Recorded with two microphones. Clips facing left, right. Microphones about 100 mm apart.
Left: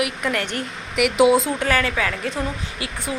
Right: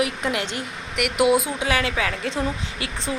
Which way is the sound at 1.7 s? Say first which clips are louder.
Even; 45° left (ahead or behind).